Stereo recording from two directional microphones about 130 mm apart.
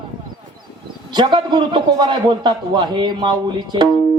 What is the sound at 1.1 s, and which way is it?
A man's voice, 35° right (ahead or behind).